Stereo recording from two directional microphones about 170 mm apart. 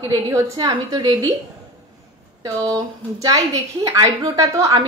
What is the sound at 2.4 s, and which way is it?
A woman's voice, 20° right (ahead or behind).